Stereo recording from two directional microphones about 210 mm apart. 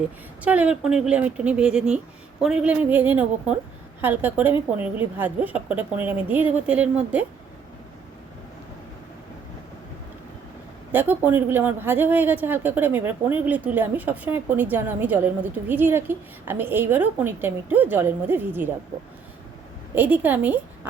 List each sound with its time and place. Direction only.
0.4 s a woman's voice: 5° right (ahead or behind)
10.9 s a woman's voice: 10° right (ahead or behind)
20.0 s a woman's voice: 10° right (ahead or behind)